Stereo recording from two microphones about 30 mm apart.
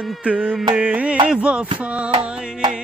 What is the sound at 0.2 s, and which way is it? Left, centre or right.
Music, right.